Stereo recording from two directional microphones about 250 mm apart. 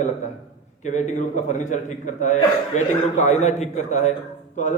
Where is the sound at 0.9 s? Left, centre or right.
Left.